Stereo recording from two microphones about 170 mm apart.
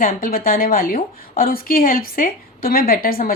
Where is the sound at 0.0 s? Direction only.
55° left (ahead or behind).